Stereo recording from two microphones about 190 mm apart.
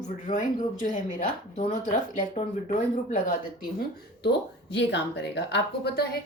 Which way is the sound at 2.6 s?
40° left (ahead or behind).